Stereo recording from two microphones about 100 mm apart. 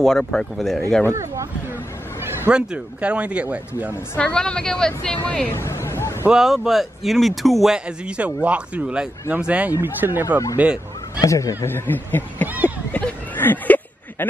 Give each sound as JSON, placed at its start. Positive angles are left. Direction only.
{"t": 0.0, "sound": "speech", "side_deg": 5}
{"t": 1.1, "sound": "speech", "side_deg": -30}
{"t": 2.5, "sound": "speech", "side_deg": -10}
{"t": 4.2, "sound": "a woman's voice", "side_deg": 10}
{"t": 5.6, "sound": "vehicle", "side_deg": 30}
{"t": 6.3, "sound": "speech", "side_deg": -5}
{"t": 11.1, "sound": "speech", "side_deg": 30}
{"t": 12.4, "sound": "a sound", "side_deg": -15}
{"t": 12.9, "sound": "a sound", "side_deg": 20}